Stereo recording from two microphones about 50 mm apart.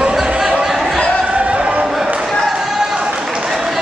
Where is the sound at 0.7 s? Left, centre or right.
Centre.